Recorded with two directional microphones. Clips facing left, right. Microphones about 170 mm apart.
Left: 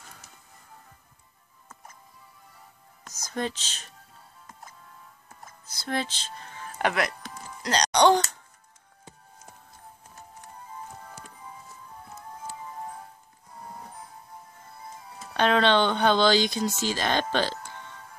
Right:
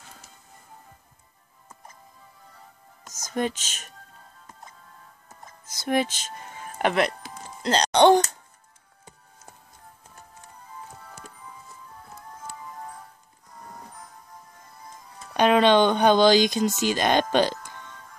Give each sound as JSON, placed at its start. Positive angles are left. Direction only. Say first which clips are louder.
{"t": 3.3, "sound": "speech", "louder": "right 4 dB", "side_deg": -15}
{"t": 5.9, "sound": "speech", "louder": "right 6 dB", "side_deg": -15}
{"t": 7.6, "sound": "speech", "louder": "right 3 dB", "side_deg": -25}
{"t": 15.3, "sound": "speech", "louder": "right 4 dB", "side_deg": -15}